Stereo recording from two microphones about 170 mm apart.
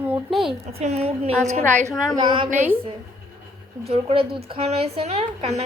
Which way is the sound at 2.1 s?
30° right (ahead or behind).